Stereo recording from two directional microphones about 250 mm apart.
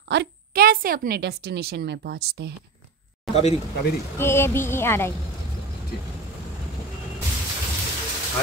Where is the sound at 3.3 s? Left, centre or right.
Left.